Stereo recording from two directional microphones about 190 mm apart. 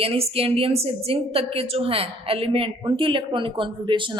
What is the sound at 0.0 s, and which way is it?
A woman's voice, 30° right (ahead or behind).